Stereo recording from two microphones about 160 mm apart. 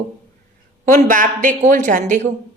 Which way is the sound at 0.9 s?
55° right (ahead or behind).